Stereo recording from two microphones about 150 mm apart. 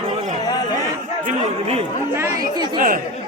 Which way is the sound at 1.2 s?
45° right (ahead or behind).